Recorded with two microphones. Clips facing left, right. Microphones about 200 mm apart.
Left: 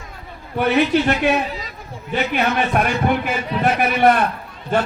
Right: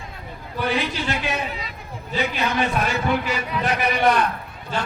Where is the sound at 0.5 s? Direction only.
60° left (ahead or behind).